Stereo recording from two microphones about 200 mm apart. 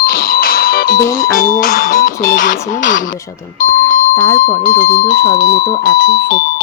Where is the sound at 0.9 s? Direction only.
15° left (ahead or behind).